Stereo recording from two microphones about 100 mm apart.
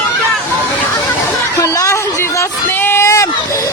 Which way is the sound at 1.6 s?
30° left (ahead or behind).